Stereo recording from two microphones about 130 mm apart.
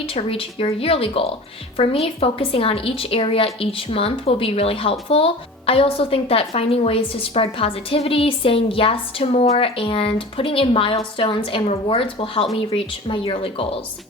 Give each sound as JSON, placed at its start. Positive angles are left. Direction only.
{"t": 0.0, "sound": "a woman's voice", "side_deg": 45}